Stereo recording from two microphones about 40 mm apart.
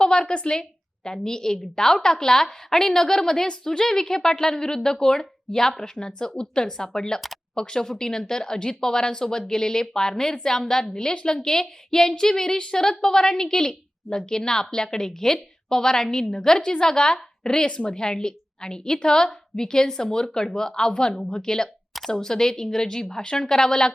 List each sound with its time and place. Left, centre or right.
0.0 s a woman's voice: centre